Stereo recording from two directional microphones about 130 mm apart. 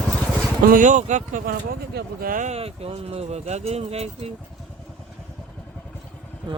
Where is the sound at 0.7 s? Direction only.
75° right (ahead or behind).